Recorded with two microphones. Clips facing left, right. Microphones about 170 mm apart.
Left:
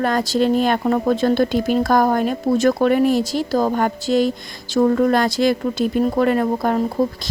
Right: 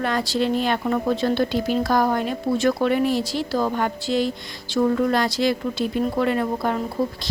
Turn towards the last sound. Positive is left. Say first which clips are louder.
# left 4 dB
turn(degrees=45)  # may be behind; listen again after turning